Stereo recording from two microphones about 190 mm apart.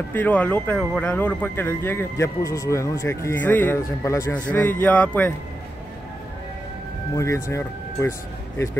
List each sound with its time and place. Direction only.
0.1 s speech: 10° left (ahead or behind)
7.2 s speech: 15° left (ahead or behind)